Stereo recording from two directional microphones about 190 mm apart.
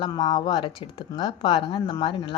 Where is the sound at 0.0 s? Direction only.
25° left (ahead or behind).